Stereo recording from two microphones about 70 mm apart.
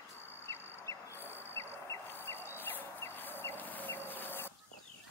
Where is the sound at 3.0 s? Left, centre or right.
Left.